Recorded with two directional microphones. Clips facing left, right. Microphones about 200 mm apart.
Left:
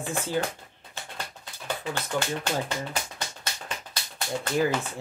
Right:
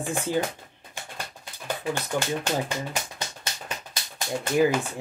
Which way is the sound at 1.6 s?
10° right (ahead or behind).